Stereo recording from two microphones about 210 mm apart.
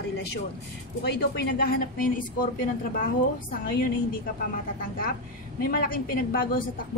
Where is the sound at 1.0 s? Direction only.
50° left (ahead or behind).